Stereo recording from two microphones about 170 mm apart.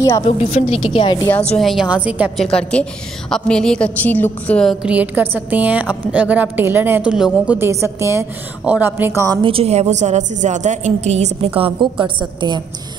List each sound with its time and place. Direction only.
0.4 s a woman's voice: 40° left (ahead or behind)
1.6 s a woman's voice: centre (ahead or behind)
2.4 s a woman's voice: 5° left (ahead or behind)
4.8 s a woman's voice: 10° right (ahead or behind)
7.5 s a woman's voice: 15° right (ahead or behind)
9.4 s a woman's voice: 35° right (ahead or behind)